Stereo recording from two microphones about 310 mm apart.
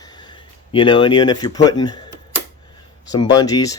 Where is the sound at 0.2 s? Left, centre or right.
Centre.